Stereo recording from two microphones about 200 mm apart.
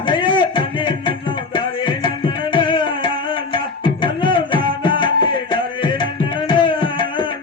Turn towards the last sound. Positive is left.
turn(degrees=25)  # may be behind; listen again after turning